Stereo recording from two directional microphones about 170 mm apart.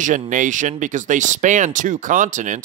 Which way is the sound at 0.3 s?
50° right (ahead or behind).